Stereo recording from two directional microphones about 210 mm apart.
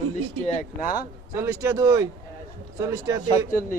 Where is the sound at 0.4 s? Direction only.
35° left (ahead or behind).